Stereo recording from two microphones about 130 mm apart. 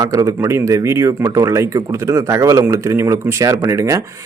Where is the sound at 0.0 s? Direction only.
25° right (ahead or behind).